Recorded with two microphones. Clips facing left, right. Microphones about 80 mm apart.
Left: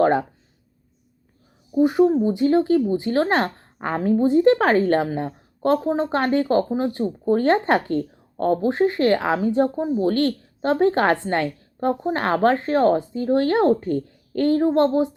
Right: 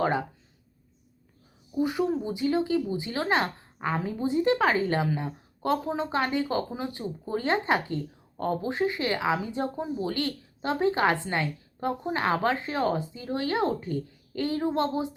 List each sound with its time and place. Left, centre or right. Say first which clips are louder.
0.0 s speech: left 8 dB; left
1.7 s speech: left 10 dB; left